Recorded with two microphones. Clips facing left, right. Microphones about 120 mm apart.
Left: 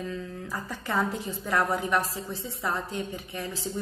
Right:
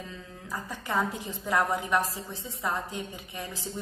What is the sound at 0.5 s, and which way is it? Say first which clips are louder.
A woman's voice: right 1 dB; 15° right (ahead or behind).